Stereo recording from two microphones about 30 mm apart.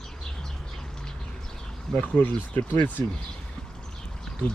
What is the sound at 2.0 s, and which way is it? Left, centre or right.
Speech, left.